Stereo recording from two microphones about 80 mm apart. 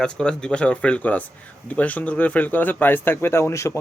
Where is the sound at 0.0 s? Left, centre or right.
Centre.